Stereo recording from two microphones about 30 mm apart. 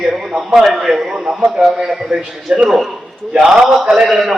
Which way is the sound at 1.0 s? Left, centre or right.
Right.